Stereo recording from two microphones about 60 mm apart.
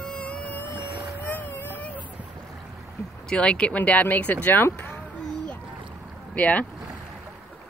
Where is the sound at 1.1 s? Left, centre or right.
Left.